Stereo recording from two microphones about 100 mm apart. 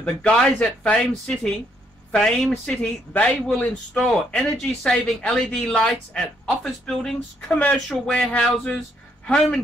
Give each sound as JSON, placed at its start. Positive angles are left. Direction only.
{"t": 0.0, "sound": "speech", "side_deg": 10}